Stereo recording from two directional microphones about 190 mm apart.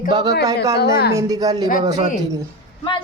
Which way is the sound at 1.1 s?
20° right (ahead or behind).